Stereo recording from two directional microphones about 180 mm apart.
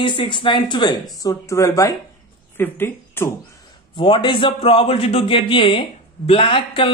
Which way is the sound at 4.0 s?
30° left (ahead or behind).